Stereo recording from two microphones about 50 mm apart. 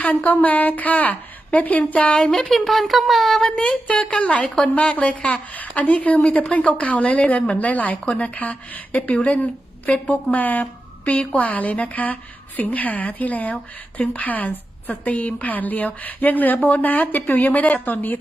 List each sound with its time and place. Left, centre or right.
0.2 s a woman's voice: left; by 2.5 s centre
2.5 s speech: centre
3.5 s a woman's voice: left
14.0 s a woman's voice: left
14.3 s a woman's voice: left